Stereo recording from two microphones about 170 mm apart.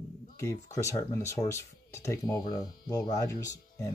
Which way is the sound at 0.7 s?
15° left (ahead or behind).